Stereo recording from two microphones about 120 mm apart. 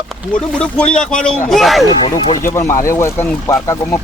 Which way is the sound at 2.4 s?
20° left (ahead or behind).